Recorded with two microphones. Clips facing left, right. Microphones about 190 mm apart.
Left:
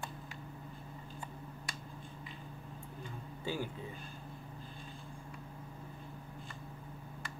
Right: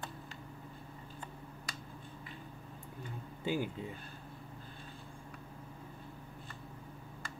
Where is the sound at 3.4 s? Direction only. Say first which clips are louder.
Right 4 dB; 15° right (ahead or behind).